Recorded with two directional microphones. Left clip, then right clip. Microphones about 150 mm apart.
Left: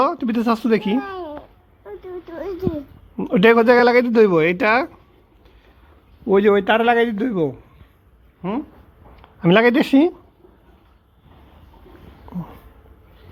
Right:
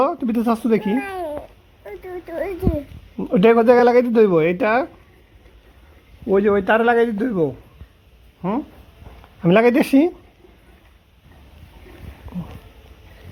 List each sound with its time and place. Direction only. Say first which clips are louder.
0.0 s speech: even; 5° right (ahead or behind)
2.2 s a sound: right 5 dB; 20° right (ahead or behind)
3.2 s speech: left 1 dB; 5° left (ahead or behind)
6.2 s speech: left 2 dB; 30° left (ahead or behind)
6.5 s speech: right 1 dB; 10° left (ahead or behind)
8.4 s speech: right 2 dB; 10° right (ahead or behind)
12.3 s a sound: left 1 dB; 15° left (ahead or behind)